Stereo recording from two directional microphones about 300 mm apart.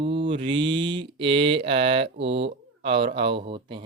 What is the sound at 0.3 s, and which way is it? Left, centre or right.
Speech, centre.